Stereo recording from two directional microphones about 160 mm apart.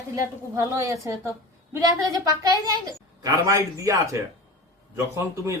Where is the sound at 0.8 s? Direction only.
20° right (ahead or behind).